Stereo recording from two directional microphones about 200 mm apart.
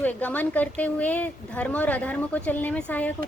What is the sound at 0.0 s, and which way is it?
A woman's voice, 10° left (ahead or behind).